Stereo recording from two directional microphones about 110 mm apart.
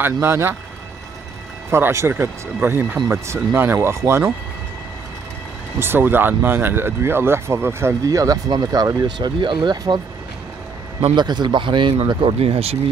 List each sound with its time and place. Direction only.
0.0 s speech: 20° right (ahead or behind)
1.7 s speech: 25° right (ahead or behind)
5.8 s speech: 20° right (ahead or behind); by 9.9 s 45° right (ahead or behind)
11.1 s a man's voice: 40° right (ahead or behind); by 12.7 s 65° right (ahead or behind)